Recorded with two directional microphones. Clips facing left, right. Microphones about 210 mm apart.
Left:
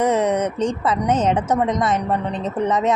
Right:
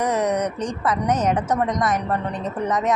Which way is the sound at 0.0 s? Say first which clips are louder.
Left 3 dB; 25° left (ahead or behind).